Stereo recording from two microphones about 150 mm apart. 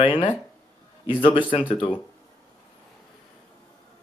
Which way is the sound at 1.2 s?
35° left (ahead or behind).